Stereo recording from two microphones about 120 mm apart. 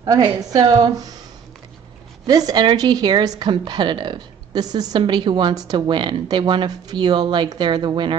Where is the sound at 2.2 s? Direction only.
30° right (ahead or behind).